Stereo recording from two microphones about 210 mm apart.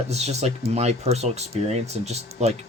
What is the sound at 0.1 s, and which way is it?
Speech, 30° right (ahead or behind).